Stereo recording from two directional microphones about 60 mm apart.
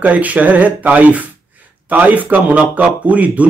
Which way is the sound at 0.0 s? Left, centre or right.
Right.